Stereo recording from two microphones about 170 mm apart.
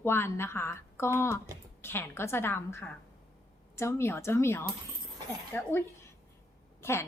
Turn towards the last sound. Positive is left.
turn(degrees=15)  # may be behind; listen again after turning